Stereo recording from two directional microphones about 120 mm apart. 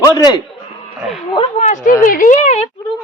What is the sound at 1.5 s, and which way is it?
Speech, 70° left (ahead or behind).